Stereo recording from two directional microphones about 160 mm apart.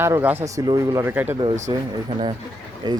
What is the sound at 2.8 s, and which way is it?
Speech, 25° right (ahead or behind).